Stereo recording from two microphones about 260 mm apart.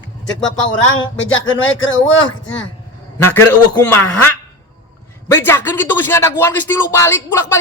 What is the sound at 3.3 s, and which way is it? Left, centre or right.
A man's voice, centre.